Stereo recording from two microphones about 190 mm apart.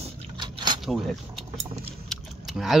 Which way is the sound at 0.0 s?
25° right (ahead or behind).